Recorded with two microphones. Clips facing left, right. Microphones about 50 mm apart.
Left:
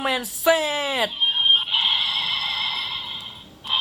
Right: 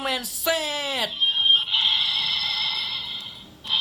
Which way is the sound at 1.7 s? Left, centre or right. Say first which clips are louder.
Left 1 dB; centre.